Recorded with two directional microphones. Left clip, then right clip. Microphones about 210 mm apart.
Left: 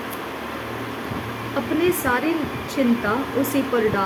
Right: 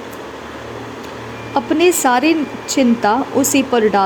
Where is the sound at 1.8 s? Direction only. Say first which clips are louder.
Right 9 dB; 35° right (ahead or behind).